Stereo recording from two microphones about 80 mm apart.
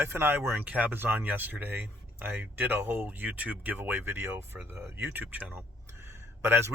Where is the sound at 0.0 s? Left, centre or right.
Right.